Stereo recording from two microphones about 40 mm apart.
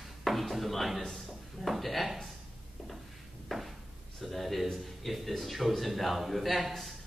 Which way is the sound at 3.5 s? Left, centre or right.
Centre.